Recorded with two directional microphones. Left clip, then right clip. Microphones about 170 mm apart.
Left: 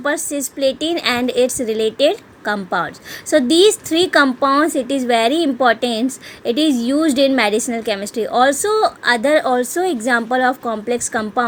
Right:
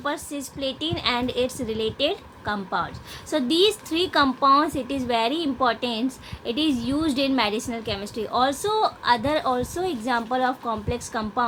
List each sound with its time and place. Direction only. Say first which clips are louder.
0.0 s a woman's voice: left 9 dB; 45° left (ahead or behind)